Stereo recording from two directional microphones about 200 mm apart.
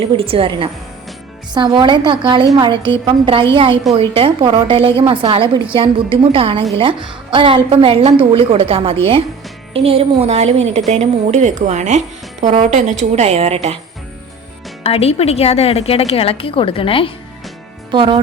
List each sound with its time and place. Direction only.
0.2 s a woman's voice: 25° right (ahead or behind)
14.8 s a woman's voice: 30° left (ahead or behind)
17.9 s a woman's voice: 25° right (ahead or behind)